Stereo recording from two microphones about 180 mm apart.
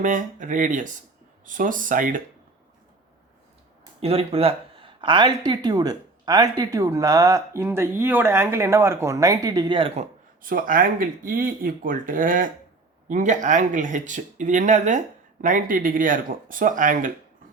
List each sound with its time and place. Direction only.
0.0 s speech: 45° right (ahead or behind)
4.0 s speech: 30° right (ahead or behind)